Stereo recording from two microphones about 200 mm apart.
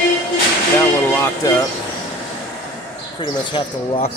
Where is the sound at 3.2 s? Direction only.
25° left (ahead or behind).